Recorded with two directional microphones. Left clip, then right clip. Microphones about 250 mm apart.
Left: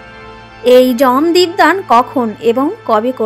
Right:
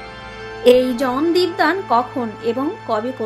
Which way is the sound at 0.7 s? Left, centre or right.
Left.